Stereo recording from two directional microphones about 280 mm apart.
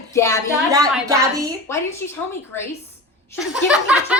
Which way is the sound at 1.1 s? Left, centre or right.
Centre.